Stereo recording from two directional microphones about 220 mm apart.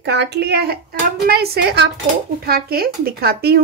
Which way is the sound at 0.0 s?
50° right (ahead or behind).